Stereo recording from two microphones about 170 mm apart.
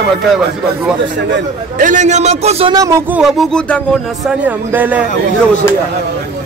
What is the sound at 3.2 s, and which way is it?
Speech, centre (ahead or behind).